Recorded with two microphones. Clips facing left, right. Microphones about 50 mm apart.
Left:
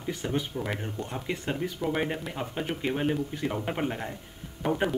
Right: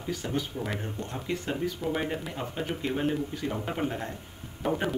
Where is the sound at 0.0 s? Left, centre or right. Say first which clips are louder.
Left 1 dB; centre.